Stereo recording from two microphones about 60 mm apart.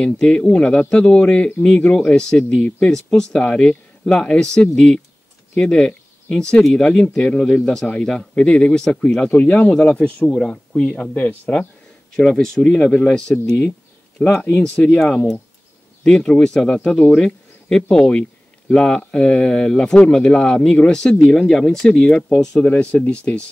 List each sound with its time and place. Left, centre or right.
0.0 s speech: centre
9.3 s speech: left
11.1 s speech: left
12.2 s speech: centre
12.7 s speech: left
13.5 s a sound: centre
14.6 s speech: centre
16.0 s speech: centre
22.7 s speech: left